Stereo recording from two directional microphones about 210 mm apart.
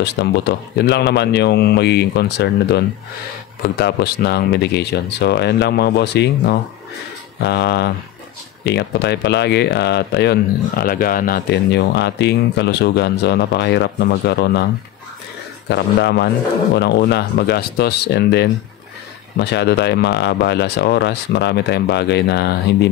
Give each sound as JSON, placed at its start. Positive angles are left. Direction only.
{"t": 0.0, "sound": "speech", "side_deg": 55}
{"t": 15.7, "sound": "speech", "side_deg": 55}